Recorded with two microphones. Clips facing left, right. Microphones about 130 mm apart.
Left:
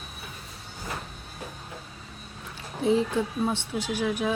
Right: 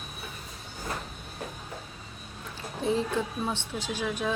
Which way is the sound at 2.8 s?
15° left (ahead or behind).